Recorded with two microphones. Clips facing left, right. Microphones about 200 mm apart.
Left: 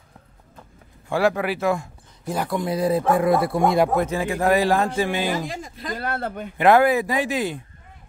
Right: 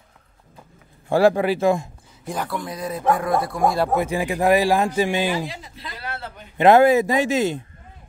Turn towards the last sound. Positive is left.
turn(degrees=-25)  # may be behind; listen again after turning